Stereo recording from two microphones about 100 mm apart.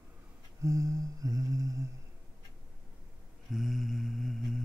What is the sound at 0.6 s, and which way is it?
Humming, 35° right (ahead or behind).